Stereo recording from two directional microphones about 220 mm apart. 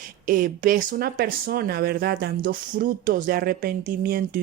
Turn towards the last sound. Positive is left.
turn(degrees=-40)  # may be behind; listen again after turning